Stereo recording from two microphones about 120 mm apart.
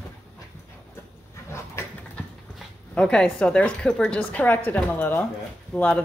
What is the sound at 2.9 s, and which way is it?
A woman's voice, 10° left (ahead or behind).